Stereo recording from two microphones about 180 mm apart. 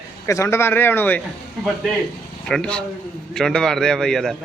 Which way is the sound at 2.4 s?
5° left (ahead or behind).